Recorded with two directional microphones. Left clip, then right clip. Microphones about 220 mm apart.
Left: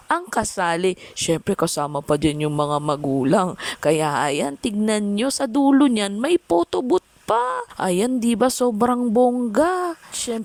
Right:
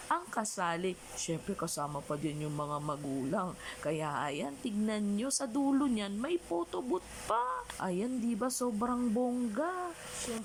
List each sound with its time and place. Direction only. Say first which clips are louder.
0.1 s speech: left 12 dB; 50° left (ahead or behind)